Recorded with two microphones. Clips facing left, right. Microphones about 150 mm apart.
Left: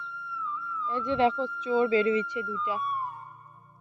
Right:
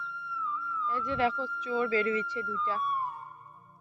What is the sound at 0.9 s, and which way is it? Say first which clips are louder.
Speech: left 5 dB; 25° left (ahead or behind).